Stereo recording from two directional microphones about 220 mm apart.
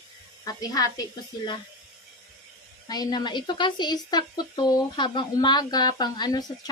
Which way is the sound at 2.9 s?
20° left (ahead or behind).